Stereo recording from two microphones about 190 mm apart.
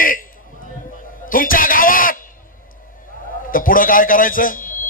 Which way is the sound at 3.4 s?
45° left (ahead or behind).